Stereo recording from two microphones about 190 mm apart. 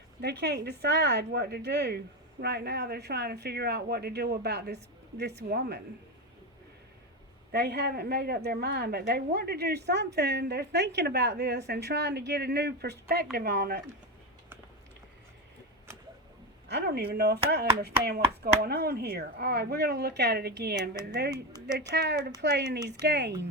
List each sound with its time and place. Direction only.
0.2 s speech: 60° right (ahead or behind)
7.5 s speech: 60° right (ahead or behind)
16.6 s speech: 60° right (ahead or behind)